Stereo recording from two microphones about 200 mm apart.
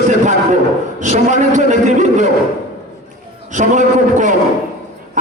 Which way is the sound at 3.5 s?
40° right (ahead or behind).